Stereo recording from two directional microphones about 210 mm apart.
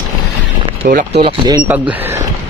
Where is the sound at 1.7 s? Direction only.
10° right (ahead or behind).